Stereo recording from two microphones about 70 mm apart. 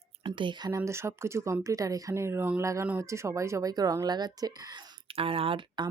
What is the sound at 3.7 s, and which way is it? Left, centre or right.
Speech, right.